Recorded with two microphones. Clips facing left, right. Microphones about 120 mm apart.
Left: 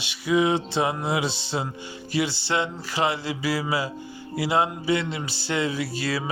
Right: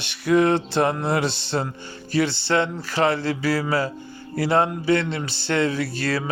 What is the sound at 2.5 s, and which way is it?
Speech, 15° left (ahead or behind).